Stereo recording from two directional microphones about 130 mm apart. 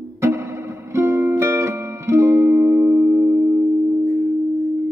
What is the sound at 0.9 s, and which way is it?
Music, 20° right (ahead or behind).